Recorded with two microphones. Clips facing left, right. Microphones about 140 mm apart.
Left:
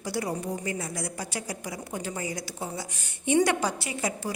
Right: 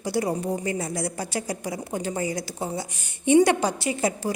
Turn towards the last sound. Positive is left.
turn(degrees=-25)  # may be behind; listen again after turning